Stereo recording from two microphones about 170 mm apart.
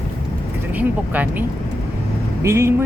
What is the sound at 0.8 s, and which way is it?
Speech, 10° right (ahead or behind).